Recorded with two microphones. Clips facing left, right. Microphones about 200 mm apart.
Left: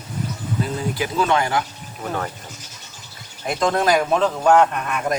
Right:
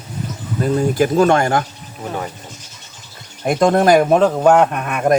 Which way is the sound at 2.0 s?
15° right (ahead or behind).